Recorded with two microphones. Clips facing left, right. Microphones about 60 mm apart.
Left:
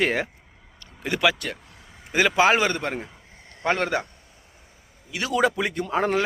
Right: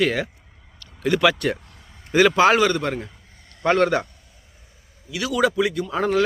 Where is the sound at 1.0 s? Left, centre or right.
Centre.